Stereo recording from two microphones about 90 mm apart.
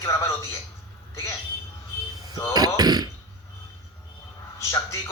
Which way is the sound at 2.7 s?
50° right (ahead or behind).